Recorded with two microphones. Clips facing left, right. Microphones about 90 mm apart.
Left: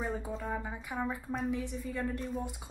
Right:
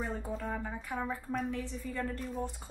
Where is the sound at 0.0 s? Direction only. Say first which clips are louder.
Left 1 dB; 5° left (ahead or behind).